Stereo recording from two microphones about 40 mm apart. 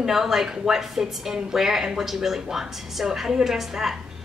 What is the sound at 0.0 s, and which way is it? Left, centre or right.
A woman's voice, centre.